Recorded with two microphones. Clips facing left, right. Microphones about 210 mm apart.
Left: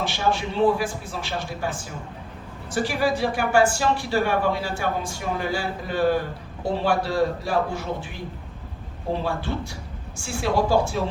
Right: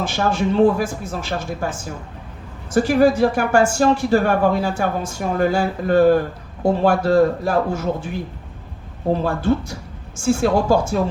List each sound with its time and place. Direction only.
0.0 s speech: 45° right (ahead or behind)
9.2 s speech: 45° right (ahead or behind)